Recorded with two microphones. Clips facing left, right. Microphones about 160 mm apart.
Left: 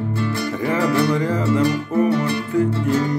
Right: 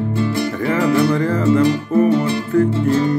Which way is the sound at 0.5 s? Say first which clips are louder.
Right 2 dB; 15° left (ahead or behind).